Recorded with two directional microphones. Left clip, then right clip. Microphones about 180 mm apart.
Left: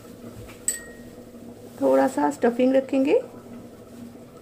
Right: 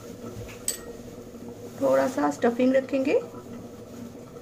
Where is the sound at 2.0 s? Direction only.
35° left (ahead or behind).